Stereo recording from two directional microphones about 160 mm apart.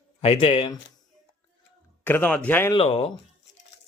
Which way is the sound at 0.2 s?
35° left (ahead or behind).